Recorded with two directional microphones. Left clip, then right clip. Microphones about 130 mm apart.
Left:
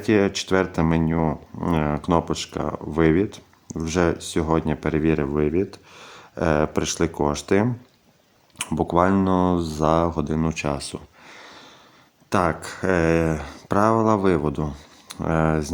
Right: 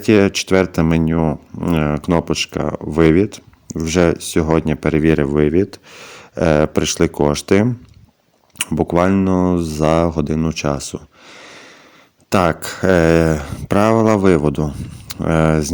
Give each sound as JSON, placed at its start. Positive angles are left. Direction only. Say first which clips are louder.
{"t": 0.0, "sound": "speech", "louder": "right 6 dB", "side_deg": -35}
{"t": 14.7, "sound": "speech", "louder": "right 7 dB", "side_deg": -20}
{"t": 15.0, "sound": "speech", "louder": "right 6 dB", "side_deg": -35}